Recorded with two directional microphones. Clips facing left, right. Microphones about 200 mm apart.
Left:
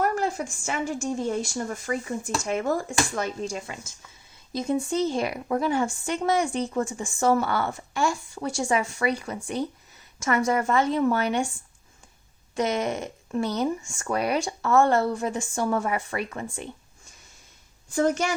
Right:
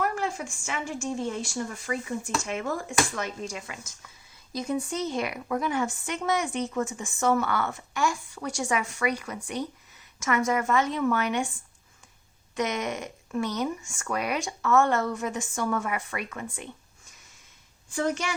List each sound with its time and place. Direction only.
0.0 s a woman's voice: 40° left (ahead or behind)
12.5 s speech: 30° left (ahead or behind)
17.9 s speech: 40° left (ahead or behind)